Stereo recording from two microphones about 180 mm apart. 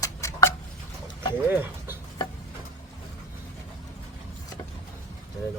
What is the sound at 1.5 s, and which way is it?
Bird, 10° right (ahead or behind).